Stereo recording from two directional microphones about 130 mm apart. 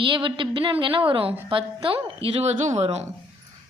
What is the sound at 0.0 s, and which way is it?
A woman's voice, 40° right (ahead or behind).